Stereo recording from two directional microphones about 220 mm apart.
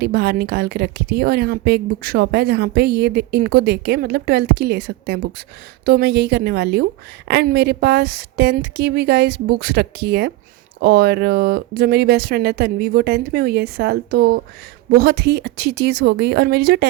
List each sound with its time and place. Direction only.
0.0 s a woman's voice: 45° right (ahead or behind)